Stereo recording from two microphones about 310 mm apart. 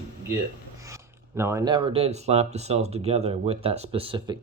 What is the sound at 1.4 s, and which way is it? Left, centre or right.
Speech, centre.